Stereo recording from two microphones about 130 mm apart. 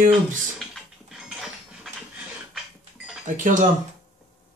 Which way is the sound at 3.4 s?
85° right.